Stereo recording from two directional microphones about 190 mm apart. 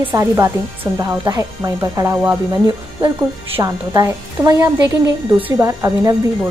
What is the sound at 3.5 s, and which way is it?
A woman's voice, 15° right (ahead or behind).